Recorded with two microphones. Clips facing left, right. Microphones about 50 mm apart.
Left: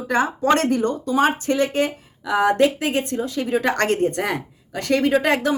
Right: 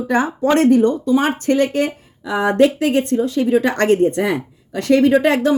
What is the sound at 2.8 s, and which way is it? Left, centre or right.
Speech, left.